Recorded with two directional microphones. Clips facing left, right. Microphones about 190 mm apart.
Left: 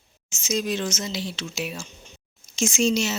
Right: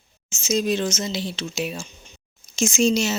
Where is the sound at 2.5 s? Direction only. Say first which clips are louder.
Right 2 dB; 40° right (ahead or behind).